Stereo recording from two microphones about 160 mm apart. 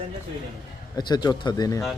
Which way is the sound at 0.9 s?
25° left (ahead or behind).